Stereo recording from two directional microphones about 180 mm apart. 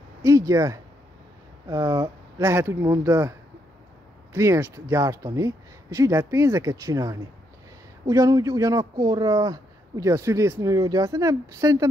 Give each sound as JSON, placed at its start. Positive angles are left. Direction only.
{"t": 0.2, "sound": "a man's voice", "side_deg": -15}